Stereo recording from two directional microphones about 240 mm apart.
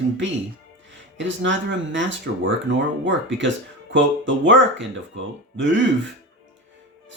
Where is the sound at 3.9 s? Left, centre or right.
Right.